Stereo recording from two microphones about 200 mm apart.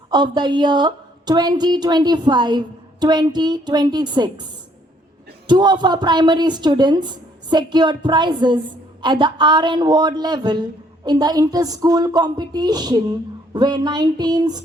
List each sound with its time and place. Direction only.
0.1 s speech: 20° right (ahead or behind)
5.5 s speech: 20° right (ahead or behind)